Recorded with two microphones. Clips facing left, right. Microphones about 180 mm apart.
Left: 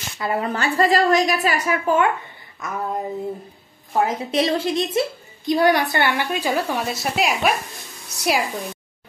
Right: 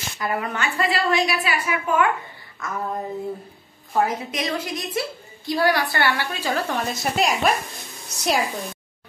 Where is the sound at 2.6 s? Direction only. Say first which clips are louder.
Left 1 dB; 20° left (ahead or behind).